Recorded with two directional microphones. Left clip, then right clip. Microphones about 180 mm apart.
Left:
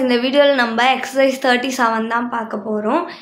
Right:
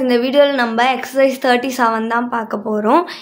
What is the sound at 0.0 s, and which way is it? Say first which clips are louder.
A woman's voice: right 1 dB; 25° right (ahead or behind).